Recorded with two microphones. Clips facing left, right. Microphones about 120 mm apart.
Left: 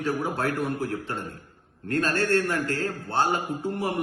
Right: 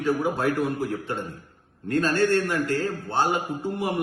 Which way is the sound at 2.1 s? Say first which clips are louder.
Right 2 dB; 5° right (ahead or behind).